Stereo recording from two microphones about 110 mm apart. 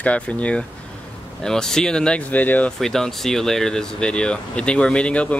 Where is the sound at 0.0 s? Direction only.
10° left (ahead or behind).